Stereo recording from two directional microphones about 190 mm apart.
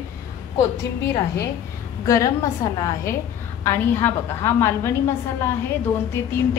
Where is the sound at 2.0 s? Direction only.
15° left (ahead or behind).